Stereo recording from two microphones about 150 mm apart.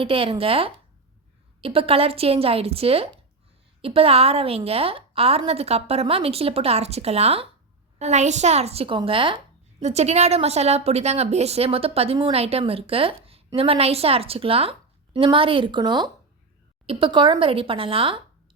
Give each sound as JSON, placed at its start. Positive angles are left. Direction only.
{"t": 0.0, "sound": "a woman's voice", "side_deg": -35}
{"t": 9.8, "sound": "a woman's voice", "side_deg": -45}